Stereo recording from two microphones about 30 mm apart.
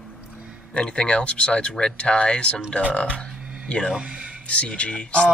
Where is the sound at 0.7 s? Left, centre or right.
Left.